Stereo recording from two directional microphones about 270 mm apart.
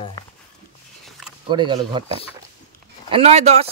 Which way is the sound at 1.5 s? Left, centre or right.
Centre.